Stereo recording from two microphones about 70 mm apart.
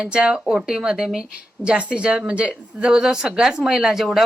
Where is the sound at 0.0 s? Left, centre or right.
Centre.